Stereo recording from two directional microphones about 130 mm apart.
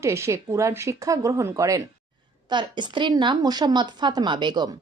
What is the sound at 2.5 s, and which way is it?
Speech, 35° right (ahead or behind).